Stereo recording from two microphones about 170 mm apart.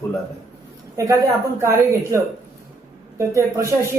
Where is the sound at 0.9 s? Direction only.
20° right (ahead or behind).